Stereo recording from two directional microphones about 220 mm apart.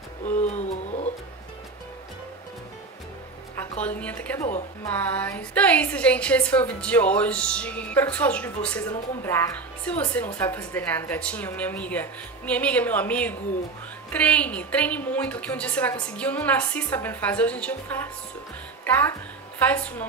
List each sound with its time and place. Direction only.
0.2 s music: 30° left (ahead or behind)
3.8 s a woman's voice: 5° left (ahead or behind)
4.5 s speech: 30° left (ahead or behind)
4.9 s a woman's voice: 5° left (ahead or behind)